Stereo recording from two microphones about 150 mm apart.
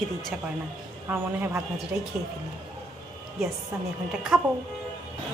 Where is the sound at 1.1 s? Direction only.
15° right (ahead or behind).